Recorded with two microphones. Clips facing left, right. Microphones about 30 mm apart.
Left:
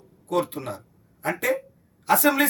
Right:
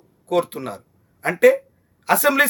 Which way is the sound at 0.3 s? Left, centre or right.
Right.